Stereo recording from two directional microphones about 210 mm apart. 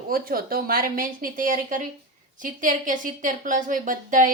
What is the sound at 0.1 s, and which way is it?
A woman's voice, 45° right (ahead or behind).